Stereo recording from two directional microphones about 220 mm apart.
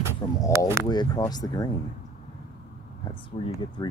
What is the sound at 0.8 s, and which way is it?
Speech, 15° left (ahead or behind).